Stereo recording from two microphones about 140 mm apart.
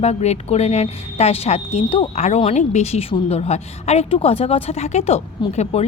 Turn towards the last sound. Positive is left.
turn(degrees=50)  # may be behind; listen again after turning